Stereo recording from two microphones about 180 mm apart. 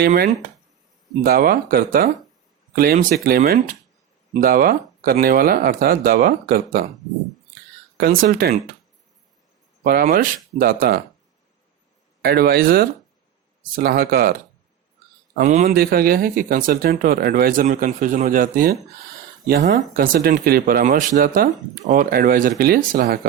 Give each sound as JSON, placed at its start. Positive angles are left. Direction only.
{"t": 0.0, "sound": "speech", "side_deg": -60}
{"t": 7.9, "sound": "speech", "side_deg": -55}
{"t": 9.8, "sound": "speech", "side_deg": -55}
{"t": 12.2, "sound": "speech", "side_deg": -60}
{"t": 15.4, "sound": "a man's voice", "side_deg": -40}
{"t": 15.6, "sound": "speech", "side_deg": -55}
{"t": 19.9, "sound": "speech", "side_deg": -55}